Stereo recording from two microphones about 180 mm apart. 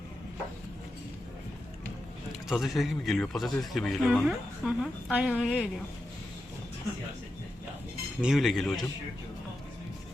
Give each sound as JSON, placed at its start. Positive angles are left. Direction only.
{"t": 2.5, "sound": "a man's voice", "side_deg": 0}
{"t": 8.2, "sound": "a man's voice", "side_deg": 0}